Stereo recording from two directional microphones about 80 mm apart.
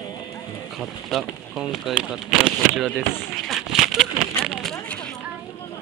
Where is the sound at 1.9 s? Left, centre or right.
Centre.